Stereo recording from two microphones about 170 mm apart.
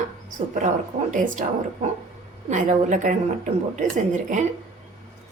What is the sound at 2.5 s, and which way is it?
A woman's voice, 50° right (ahead or behind).